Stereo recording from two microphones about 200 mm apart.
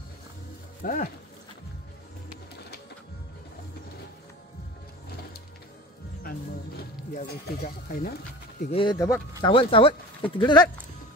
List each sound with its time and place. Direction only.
0.8 s speech: 40° left (ahead or behind)
7.2 s speech: 45° left (ahead or behind)
8.6 s speech: 25° left (ahead or behind)